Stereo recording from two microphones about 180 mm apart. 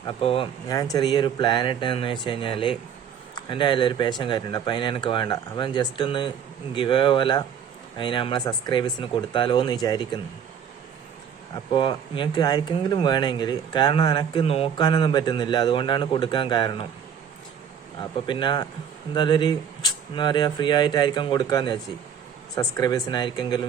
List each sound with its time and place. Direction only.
0.1 s speech: 30° left (ahead or behind)
11.5 s speech: 25° left (ahead or behind)
18.3 s speech: 25° left (ahead or behind)